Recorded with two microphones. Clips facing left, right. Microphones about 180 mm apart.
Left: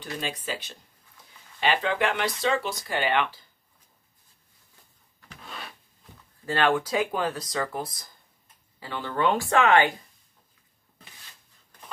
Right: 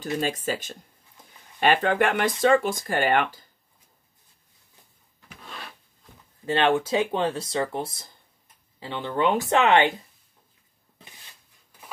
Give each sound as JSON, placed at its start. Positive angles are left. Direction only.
{"t": 0.2, "sound": "speech", "side_deg": -45}
{"t": 6.4, "sound": "speech", "side_deg": -25}